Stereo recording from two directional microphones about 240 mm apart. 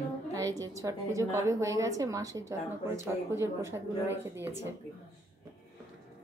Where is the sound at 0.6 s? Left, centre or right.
Centre.